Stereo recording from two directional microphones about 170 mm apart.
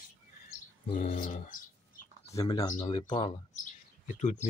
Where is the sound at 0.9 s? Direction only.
45° left (ahead or behind).